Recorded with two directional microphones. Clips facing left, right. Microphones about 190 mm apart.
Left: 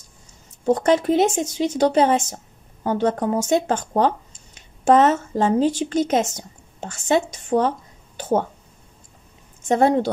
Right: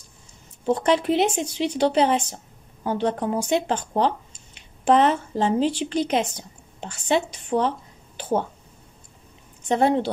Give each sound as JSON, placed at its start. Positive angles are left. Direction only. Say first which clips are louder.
{"t": 0.7, "sound": "a woman's voice", "louder": "left 3 dB", "side_deg": 45}
{"t": 9.6, "sound": "speech", "louder": "left 3 dB", "side_deg": 45}